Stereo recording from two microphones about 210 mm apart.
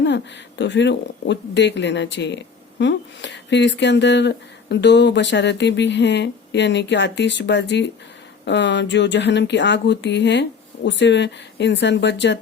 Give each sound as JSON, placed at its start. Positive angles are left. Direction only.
{"t": 0.0, "sound": "speech", "side_deg": 55}